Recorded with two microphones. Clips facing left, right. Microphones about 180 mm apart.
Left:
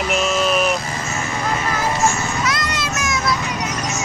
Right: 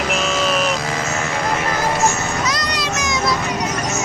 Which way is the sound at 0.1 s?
Centre (ahead or behind).